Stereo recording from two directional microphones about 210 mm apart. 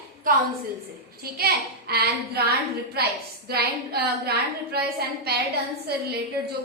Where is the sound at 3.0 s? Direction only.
50° right (ahead or behind).